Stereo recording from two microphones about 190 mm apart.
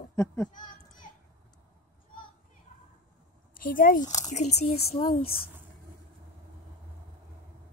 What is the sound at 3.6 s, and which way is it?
Speech, 45° left (ahead or behind).